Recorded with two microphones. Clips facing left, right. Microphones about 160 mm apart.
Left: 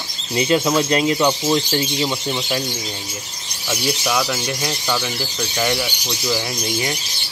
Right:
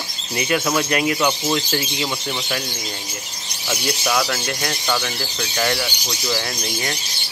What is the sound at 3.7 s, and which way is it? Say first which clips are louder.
Speech: left 1 dB; 5° left (ahead or behind).